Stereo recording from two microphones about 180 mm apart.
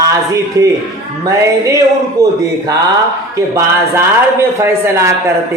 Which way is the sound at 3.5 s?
15° right (ahead or behind).